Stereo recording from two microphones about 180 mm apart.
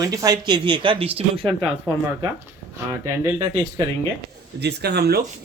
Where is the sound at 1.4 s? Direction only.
Centre (ahead or behind).